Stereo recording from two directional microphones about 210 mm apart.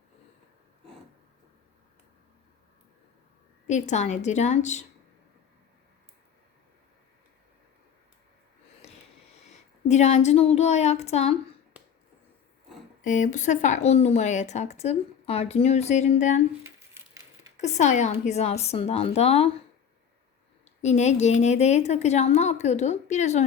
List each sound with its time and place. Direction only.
3.7 s a woman's voice: 35° left (ahead or behind)
9.5 s speech: 30° left (ahead or behind)
13.1 s a woman's voice: 35° left (ahead or behind)
16.6 s crumpling: 10° right (ahead or behind)
17.6 s a woman's voice: 35° left (ahead or behind)
20.7 s a woman's voice: 30° left (ahead or behind)